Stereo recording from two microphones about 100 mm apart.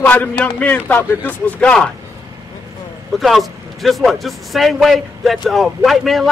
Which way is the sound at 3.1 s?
Centre (ahead or behind).